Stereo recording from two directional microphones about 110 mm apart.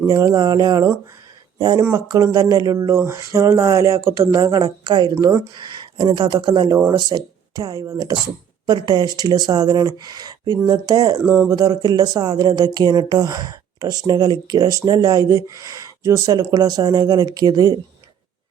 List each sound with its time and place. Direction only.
0.1 s speech: 30° right (ahead or behind)
8.6 s speech: 40° right (ahead or behind)